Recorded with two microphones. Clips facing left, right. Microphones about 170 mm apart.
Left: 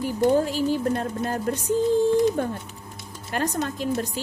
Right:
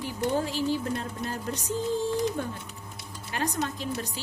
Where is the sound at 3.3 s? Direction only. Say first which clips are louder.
Left 4 dB; 45° left (ahead or behind).